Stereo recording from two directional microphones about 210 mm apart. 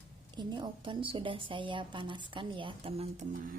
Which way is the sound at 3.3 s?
45° right (ahead or behind).